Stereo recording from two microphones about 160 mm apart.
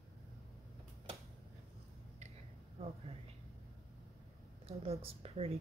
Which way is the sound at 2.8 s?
40° right (ahead or behind).